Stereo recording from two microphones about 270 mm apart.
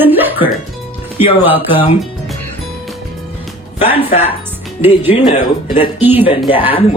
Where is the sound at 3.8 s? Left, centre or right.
Left.